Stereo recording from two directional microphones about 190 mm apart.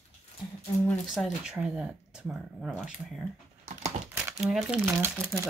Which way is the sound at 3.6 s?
35° right (ahead or behind).